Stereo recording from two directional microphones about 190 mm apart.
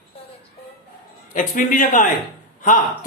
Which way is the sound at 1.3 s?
40° left (ahead or behind).